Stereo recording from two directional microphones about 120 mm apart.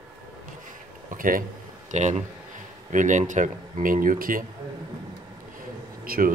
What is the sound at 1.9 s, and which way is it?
Speech, 85° right.